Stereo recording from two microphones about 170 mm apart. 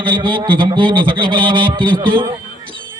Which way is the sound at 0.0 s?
30° right (ahead or behind).